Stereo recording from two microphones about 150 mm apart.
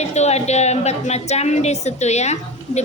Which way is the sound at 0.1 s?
45° left (ahead or behind).